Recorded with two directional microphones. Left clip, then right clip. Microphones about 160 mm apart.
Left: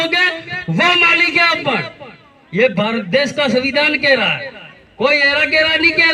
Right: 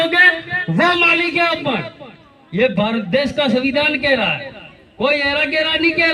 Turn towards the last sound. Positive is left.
turn(degrees=25)  # may be behind; listen again after turning